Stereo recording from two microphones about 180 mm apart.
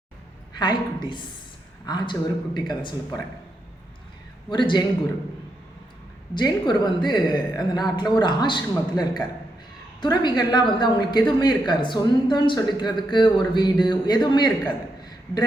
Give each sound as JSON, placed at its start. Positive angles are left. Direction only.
{"t": 0.6, "sound": "a woman's voice", "side_deg": 25}
{"t": 4.4, "sound": "a woman's voice", "side_deg": 25}
{"t": 6.3, "sound": "a woman's voice", "side_deg": 25}